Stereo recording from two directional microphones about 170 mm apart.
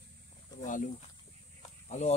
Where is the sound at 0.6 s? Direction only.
50° left (ahead or behind).